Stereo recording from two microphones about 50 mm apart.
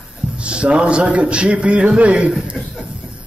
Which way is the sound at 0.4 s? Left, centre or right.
Right.